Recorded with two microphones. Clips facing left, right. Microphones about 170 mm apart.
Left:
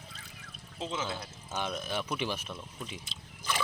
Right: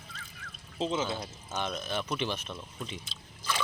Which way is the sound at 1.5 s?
10° left (ahead or behind).